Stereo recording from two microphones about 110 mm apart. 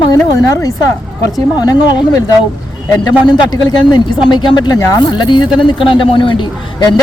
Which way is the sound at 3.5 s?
45° left (ahead or behind).